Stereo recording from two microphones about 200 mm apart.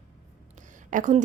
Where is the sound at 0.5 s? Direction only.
40° right (ahead or behind).